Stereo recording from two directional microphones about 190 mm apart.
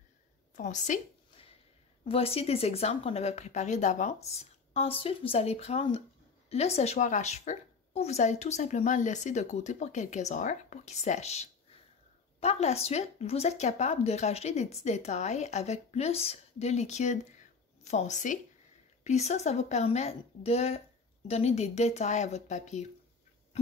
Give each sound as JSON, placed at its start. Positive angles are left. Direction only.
{"t": 0.6, "sound": "a woman's voice", "side_deg": 40}